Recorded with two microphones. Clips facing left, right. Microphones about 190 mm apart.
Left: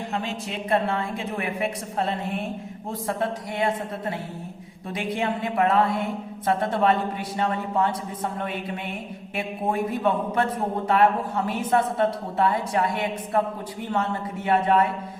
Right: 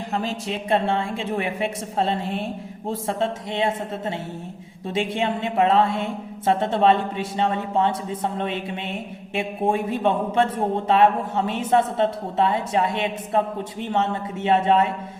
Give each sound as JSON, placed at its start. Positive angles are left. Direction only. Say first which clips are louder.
{"t": 0.1, "sound": "speech", "louder": "right 3 dB", "side_deg": -40}